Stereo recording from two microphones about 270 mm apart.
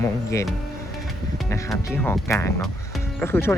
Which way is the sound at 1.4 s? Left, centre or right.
Centre.